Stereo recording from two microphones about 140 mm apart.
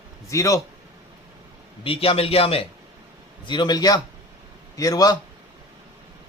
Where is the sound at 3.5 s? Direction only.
30° left (ahead or behind).